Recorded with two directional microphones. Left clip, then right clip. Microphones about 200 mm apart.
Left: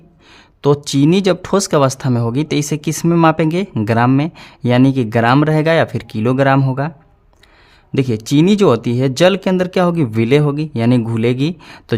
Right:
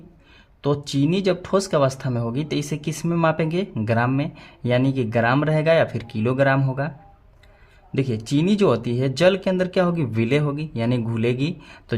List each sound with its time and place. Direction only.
0.9 s speech: 45° left (ahead or behind)
7.9 s speech: 40° left (ahead or behind)